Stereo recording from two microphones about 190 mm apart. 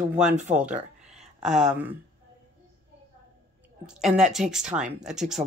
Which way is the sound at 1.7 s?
10° right (ahead or behind).